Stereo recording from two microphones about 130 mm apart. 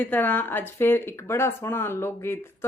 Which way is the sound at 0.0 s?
15° left (ahead or behind).